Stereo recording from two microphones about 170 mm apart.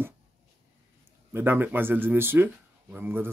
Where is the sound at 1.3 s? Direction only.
10° right (ahead or behind).